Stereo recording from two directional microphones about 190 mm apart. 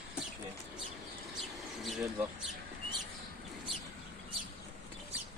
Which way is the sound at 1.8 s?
Centre (ahead or behind).